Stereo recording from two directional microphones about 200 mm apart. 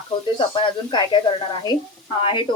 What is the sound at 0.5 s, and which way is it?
Speech, 25° left (ahead or behind).